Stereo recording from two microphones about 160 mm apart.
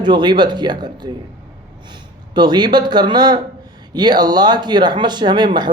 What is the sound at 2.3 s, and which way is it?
Speech, 25° right (ahead or behind).